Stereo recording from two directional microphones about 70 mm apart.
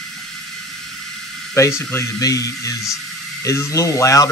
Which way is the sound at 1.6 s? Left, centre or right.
Left.